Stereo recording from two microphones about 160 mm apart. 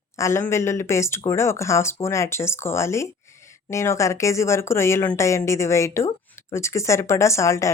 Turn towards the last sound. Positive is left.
turn(degrees=20)  # may be behind; listen again after turning